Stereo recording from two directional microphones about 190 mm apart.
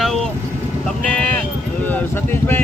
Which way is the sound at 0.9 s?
5° left (ahead or behind).